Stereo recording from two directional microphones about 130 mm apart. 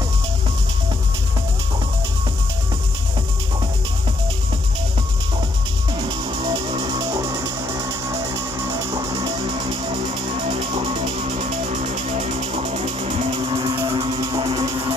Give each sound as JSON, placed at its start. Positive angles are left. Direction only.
{"t": 5.9, "sound": "music", "side_deg": -35}
{"t": 10.5, "sound": "music", "side_deg": -50}